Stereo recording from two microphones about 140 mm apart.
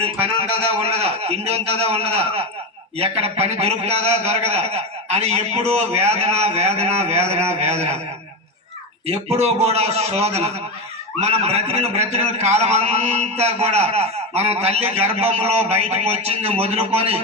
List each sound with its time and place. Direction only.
0.0 s a man's voice: 45° right (ahead or behind)
9.0 s a man's voice: 45° right (ahead or behind)